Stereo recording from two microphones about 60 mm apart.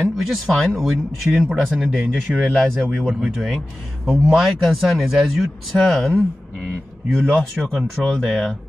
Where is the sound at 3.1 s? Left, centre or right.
Centre.